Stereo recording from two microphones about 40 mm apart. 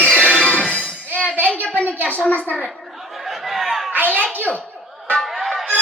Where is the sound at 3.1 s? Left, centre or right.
Centre.